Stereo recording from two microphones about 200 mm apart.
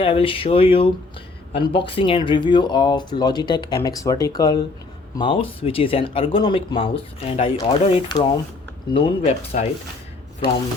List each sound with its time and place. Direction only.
0.0 s speech: 30° left (ahead or behind)